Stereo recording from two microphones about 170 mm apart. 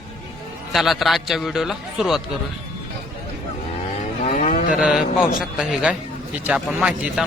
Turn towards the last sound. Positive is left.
turn(degrees=0)  # may be behind; listen again after turning